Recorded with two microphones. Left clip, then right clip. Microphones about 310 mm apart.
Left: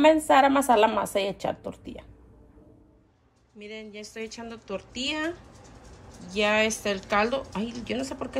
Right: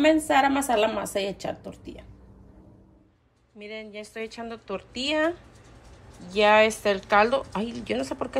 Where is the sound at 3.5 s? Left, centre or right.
Centre.